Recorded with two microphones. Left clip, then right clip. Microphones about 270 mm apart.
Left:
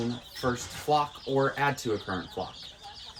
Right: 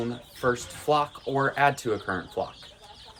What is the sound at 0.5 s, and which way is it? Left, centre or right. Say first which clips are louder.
Speech: even; centre.